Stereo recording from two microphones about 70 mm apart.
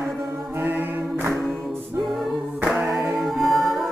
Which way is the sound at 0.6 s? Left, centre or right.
Right.